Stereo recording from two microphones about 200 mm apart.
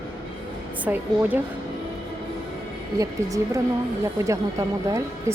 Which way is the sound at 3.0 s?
15° right (ahead or behind).